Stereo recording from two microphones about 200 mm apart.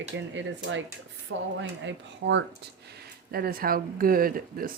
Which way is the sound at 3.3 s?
50° right (ahead or behind).